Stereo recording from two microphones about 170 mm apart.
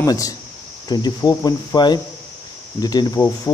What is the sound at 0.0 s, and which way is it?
Speech, 20° left (ahead or behind).